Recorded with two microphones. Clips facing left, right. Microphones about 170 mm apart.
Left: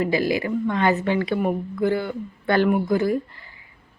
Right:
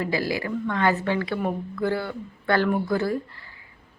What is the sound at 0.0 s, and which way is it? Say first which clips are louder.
A woman's voice: left 4 dB; 20° left (ahead or behind).